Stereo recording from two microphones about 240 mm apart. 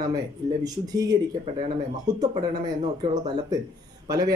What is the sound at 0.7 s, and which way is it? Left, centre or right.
Speech, centre.